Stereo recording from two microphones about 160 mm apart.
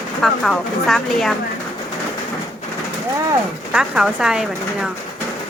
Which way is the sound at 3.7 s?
5° right (ahead or behind).